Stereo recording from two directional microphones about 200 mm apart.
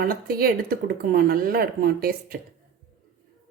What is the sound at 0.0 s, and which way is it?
Speech, 50° right (ahead or behind).